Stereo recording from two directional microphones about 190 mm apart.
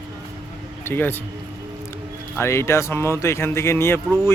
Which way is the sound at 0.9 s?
10° left (ahead or behind).